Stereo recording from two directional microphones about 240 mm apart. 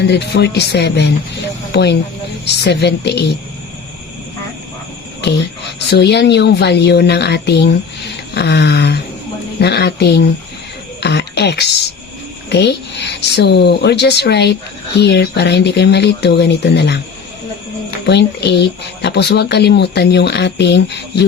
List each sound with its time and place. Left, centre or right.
0.0 s a woman's voice: left
5.9 s a woman's voice: left
11.0 s music: left
12.5 s a woman's voice: left
18.0 s a woman's voice: left